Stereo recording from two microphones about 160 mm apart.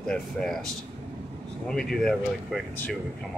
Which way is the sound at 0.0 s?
5° left (ahead or behind).